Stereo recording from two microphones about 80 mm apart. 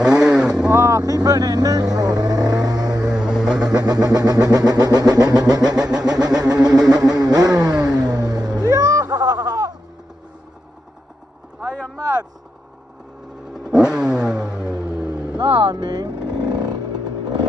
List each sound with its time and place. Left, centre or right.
0.0 s vehicle: centre
0.7 s vehicle: right
3.0 s vehicle: centre
3.6 s vehicle: right
11.6 s vehicle: left
13.5 s vehicle: centre
14.7 s vehicle: right
15.3 s vehicle: right